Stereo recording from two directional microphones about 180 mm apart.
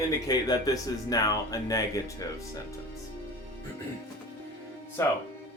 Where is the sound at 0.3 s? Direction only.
20° left (ahead or behind).